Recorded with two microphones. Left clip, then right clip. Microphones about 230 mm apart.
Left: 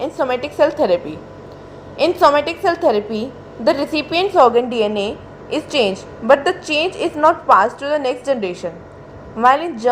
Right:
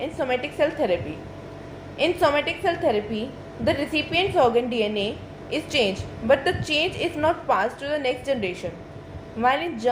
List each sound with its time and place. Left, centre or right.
0.0 s a woman's voice: left
2.0 s a woman's voice: left